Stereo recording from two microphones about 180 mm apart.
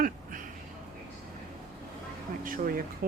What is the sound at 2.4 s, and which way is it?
Speech, 50° right (ahead or behind).